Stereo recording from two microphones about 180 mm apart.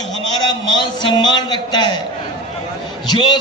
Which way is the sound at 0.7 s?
25° left (ahead or behind).